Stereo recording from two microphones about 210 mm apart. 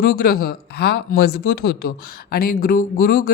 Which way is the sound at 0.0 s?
45° left (ahead or behind).